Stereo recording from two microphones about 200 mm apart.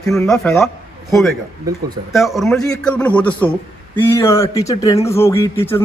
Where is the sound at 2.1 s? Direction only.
Centre (ahead or behind).